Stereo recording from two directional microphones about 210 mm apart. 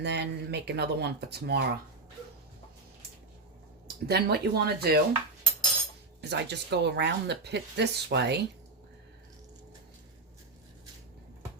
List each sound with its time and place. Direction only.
0.0 s speech: 55° right (ahead or behind)
3.8 s speech: 50° right (ahead or behind)
6.2 s speech: 55° right (ahead or behind)